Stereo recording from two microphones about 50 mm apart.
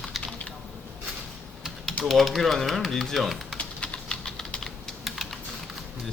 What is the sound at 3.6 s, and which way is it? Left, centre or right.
Typing, left.